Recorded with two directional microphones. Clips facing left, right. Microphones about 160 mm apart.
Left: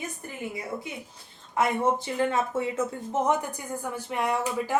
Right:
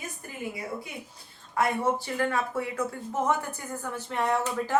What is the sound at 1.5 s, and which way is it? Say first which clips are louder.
A woman's voice: left 2 dB; 20° left (ahead or behind).